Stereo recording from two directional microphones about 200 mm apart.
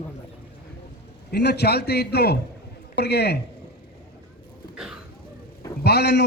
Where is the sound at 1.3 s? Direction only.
55° left (ahead or behind).